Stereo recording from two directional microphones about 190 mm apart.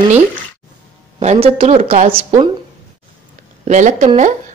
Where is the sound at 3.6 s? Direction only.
40° right (ahead or behind).